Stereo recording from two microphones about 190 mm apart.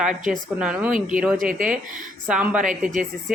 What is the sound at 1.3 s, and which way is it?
Speech, 45° right (ahead or behind).